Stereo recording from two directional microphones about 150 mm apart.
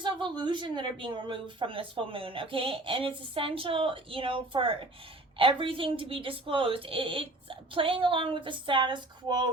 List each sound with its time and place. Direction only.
0.0 s speech: 30° right (ahead or behind)